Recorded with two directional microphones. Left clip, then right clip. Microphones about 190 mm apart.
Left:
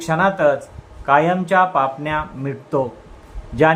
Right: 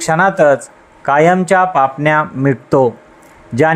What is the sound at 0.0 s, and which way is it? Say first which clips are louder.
Speech: right 5 dB; 40° right (ahead or behind).